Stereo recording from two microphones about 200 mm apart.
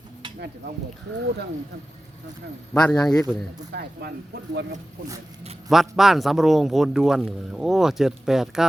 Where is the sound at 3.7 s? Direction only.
50° right (ahead or behind).